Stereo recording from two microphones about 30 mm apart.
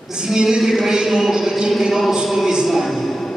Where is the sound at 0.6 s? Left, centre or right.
Centre.